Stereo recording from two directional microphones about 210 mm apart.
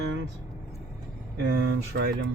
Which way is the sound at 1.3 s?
55° right (ahead or behind).